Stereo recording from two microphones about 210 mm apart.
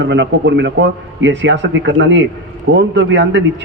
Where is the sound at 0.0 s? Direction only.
55° right (ahead or behind).